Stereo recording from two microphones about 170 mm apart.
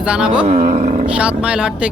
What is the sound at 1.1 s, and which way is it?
Speech, 5° right (ahead or behind).